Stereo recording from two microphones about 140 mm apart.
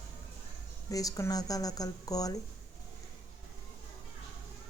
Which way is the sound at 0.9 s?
25° left (ahead or behind).